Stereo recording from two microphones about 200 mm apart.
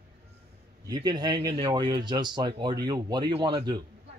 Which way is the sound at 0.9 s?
20° right (ahead or behind).